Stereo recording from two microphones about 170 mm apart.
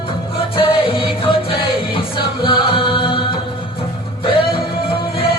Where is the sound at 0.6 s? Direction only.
30° left (ahead or behind).